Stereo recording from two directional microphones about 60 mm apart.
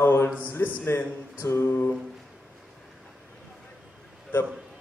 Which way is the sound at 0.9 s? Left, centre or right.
Left.